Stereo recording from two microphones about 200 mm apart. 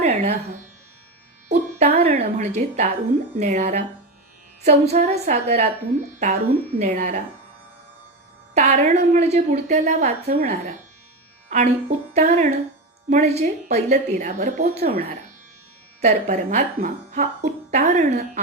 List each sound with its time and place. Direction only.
0.0 s music: 30° right (ahead or behind)
1.5 s music: 35° right (ahead or behind)
3.3 s speech: 35° right (ahead or behind)
8.5 s speech: 35° right (ahead or behind)
16.0 s speech: 35° right (ahead or behind)